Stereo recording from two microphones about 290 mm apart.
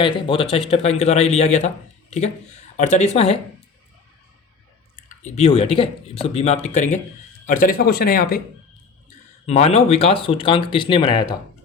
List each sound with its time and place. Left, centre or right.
0.0 s speech: centre
5.2 s speech: left